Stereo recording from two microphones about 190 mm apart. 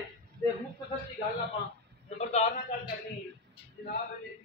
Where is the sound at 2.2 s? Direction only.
35° left (ahead or behind).